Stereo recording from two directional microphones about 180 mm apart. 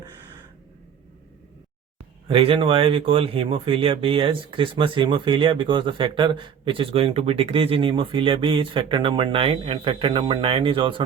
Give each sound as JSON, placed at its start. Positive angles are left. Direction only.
{"t": 2.2, "sound": "speech", "side_deg": -30}